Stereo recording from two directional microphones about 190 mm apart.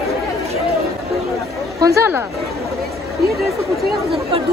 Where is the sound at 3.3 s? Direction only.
Centre (ahead or behind).